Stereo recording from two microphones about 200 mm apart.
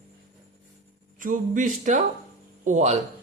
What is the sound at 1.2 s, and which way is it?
Speech, 40° right (ahead or behind).